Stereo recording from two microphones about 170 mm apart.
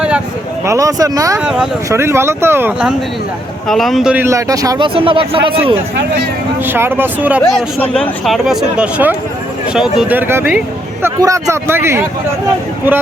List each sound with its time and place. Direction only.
0.6 s speech: 20° right (ahead or behind)
1.4 s speech: 5° right (ahead or behind)
1.9 s speech: 15° right (ahead or behind)
3.7 s speech: centre (ahead or behind); by 4.9 s 20° right (ahead or behind)
4.9 s a man's voice: 30° right (ahead or behind)
6.7 s speech: 15° right (ahead or behind)
7.8 s speech: centre (ahead or behind); by 12.0 s 15° right (ahead or behind)